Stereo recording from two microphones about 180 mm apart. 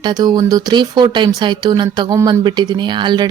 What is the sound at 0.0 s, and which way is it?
Speech, 20° right (ahead or behind).